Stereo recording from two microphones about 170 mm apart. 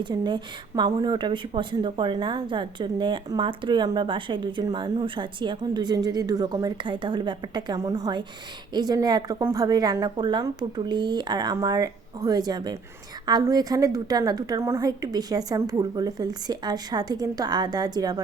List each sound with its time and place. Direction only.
0.0 s speech: 25° right (ahead or behind)